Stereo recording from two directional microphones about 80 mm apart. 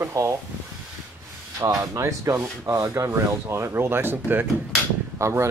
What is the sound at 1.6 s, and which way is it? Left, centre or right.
Speech, right.